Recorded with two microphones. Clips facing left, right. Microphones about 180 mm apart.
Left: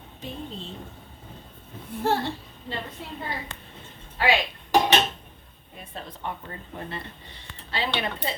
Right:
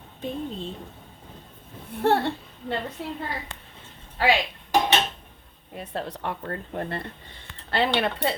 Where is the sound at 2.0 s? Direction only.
60° right (ahead or behind).